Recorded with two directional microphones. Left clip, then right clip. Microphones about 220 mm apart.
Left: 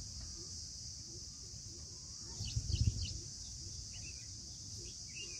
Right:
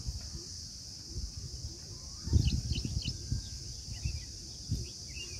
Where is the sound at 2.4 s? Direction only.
40° right (ahead or behind).